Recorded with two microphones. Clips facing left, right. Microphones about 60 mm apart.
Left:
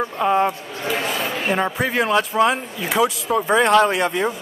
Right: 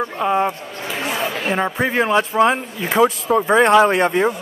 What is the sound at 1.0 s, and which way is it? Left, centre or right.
Speech, right.